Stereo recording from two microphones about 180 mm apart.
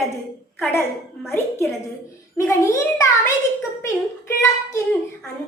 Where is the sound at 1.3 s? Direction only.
15° left (ahead or behind).